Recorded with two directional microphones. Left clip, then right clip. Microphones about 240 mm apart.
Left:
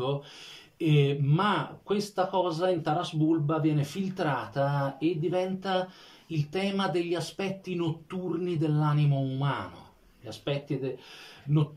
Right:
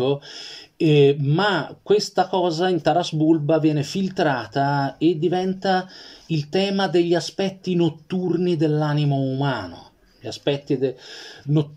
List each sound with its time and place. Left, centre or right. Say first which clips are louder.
0.7 s speech: right 11 dB; right